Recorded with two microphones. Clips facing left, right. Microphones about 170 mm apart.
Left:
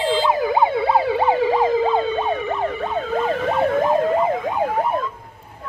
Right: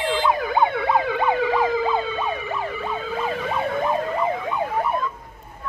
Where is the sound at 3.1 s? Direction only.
55° left (ahead or behind).